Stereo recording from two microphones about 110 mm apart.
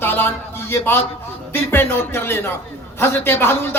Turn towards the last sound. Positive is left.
turn(degrees=20)  # may be behind; listen again after turning